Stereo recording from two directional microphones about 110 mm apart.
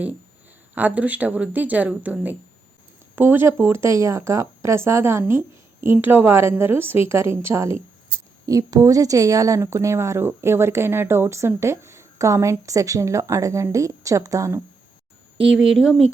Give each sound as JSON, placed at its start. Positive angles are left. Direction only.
{"t": 0.8, "sound": "a woman's voice", "side_deg": -15}
{"t": 15.4, "sound": "speech", "side_deg": -5}